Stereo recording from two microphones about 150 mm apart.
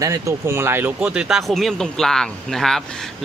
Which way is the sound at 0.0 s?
20° right (ahead or behind).